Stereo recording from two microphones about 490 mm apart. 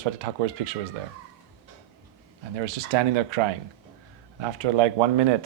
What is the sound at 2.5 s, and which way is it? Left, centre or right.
Speech, right.